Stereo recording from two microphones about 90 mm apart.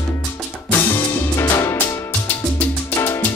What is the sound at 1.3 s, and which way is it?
Music, 30° left (ahead or behind).